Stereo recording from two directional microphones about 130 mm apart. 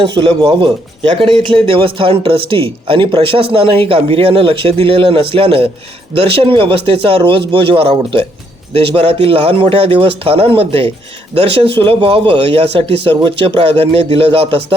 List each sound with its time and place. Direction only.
0.0 s speech: 40° right (ahead or behind)